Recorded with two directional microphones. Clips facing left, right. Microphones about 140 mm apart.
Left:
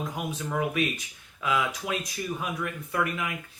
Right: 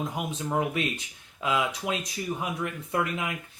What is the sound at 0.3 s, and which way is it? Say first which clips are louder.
Speech: even; 25° right (ahead or behind).